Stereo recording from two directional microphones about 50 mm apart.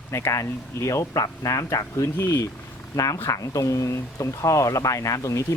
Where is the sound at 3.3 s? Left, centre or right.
Left.